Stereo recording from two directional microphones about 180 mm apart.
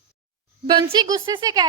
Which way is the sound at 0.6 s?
25° right (ahead or behind).